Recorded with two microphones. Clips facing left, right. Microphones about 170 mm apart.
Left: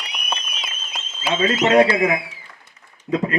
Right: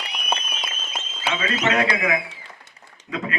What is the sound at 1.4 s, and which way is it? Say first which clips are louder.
Speech: left 8 dB; 30° left (ahead or behind).